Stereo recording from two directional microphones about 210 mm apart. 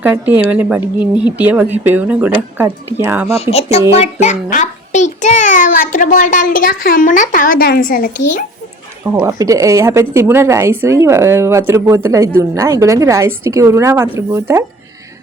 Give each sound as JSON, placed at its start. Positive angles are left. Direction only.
{"t": 0.0, "sound": "a woman's voice", "side_deg": -10}
{"t": 3.5, "sound": "a child's voice", "side_deg": 30}
{"t": 9.1, "sound": "a woman's voice", "side_deg": -15}